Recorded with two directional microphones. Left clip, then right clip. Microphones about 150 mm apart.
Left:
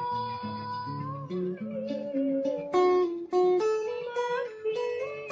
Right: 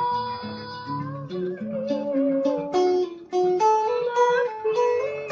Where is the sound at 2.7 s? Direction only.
45° left (ahead or behind).